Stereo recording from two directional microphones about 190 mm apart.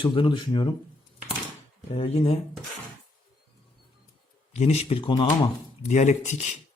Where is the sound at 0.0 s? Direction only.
25° left (ahead or behind).